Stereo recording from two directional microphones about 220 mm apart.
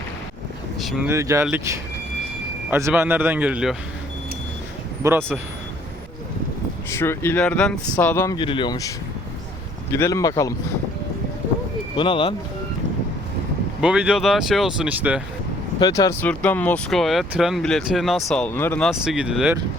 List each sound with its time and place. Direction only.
0.8 s speech: centre (ahead or behind)
1.1 s speech: 15° right (ahead or behind)
5.0 s speech: 10° right (ahead or behind)
6.9 s speech: 10° left (ahead or behind)
9.9 s speech: 15° left (ahead or behind)
11.9 s speech: 20° left (ahead or behind)
13.8 s speech: 5° right (ahead or behind)
15.8 s speech: 15° left (ahead or behind); by 19.5 s 5° right (ahead or behind)